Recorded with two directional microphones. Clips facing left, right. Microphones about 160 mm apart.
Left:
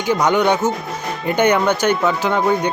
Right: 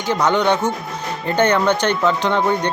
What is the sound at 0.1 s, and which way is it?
Speech, 10° left (ahead or behind).